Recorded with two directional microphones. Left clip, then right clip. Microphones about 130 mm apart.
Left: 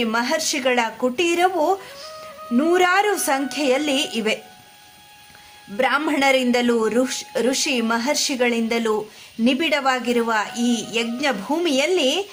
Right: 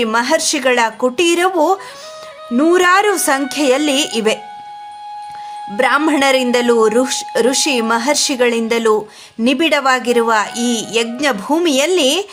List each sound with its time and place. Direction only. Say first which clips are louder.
0.0 s speech: right 7 dB; 35° right (ahead or behind)
5.7 s speech: right 6 dB; 35° right (ahead or behind)